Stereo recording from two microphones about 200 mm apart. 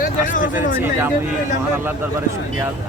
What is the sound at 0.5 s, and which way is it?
Speech, 10° right (ahead or behind).